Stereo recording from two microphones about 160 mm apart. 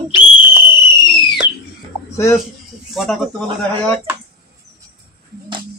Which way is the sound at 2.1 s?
15° left (ahead or behind).